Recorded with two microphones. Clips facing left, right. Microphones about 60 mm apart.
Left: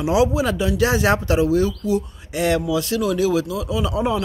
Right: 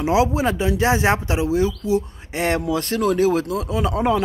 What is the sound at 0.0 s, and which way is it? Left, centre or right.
Speech, right.